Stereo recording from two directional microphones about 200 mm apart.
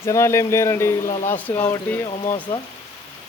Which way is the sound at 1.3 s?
10° left (ahead or behind).